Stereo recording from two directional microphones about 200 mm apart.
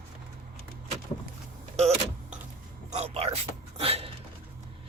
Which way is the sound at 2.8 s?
30° right (ahead or behind).